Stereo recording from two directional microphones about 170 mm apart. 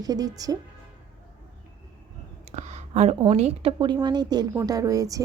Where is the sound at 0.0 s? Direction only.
20° right (ahead or behind).